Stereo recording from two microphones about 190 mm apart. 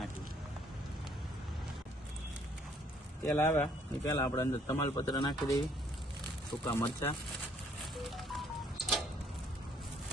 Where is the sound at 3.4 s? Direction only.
10° left (ahead or behind).